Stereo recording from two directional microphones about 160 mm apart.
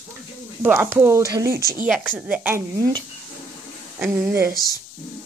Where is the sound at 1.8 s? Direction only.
5° right (ahead or behind).